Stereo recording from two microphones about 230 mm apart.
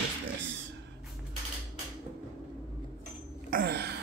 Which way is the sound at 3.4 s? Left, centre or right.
Right.